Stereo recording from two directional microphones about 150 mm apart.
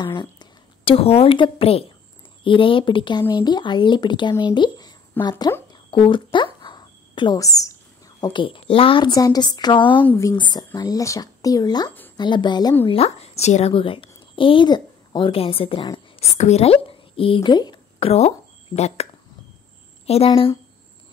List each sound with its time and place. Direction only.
0.0 s a woman's voice: 30° left (ahead or behind)
5.2 s a woman's voice: 15° left (ahead or behind)
5.7 s a sound: 35° left (ahead or behind)
8.2 s speech: 30° left (ahead or behind)
10.0 s speech: 20° left (ahead or behind)
10.3 s speech: 30° left (ahead or behind)
12.8 s a woman's voice: 40° left (ahead or behind)
16.2 s speech: 45° left (ahead or behind)
20.1 s speech: 40° left (ahead or behind)